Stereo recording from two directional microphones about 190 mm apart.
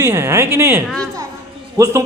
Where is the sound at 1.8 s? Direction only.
15° right (ahead or behind).